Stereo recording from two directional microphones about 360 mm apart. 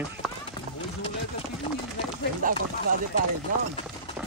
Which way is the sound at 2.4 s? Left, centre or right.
Right.